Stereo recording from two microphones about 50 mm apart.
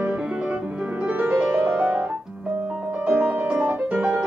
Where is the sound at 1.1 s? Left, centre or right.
Right.